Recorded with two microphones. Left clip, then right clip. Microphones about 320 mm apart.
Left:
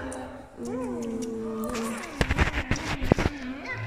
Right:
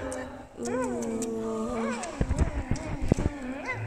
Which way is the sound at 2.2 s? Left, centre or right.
Left.